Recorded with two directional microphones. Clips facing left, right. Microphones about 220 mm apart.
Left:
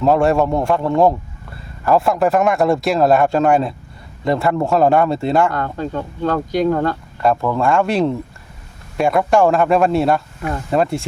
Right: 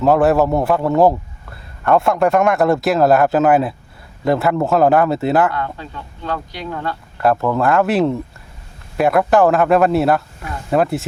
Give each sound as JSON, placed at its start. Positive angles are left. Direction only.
{"t": 0.0, "sound": "a man's voice", "side_deg": 0}
{"t": 5.5, "sound": "speech", "side_deg": 45}
{"t": 7.2, "sound": "a man's voice", "side_deg": -5}